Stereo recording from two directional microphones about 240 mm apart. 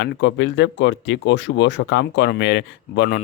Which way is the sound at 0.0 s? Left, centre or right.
Left.